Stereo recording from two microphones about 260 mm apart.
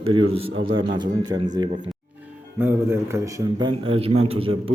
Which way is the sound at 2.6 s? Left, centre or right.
Centre.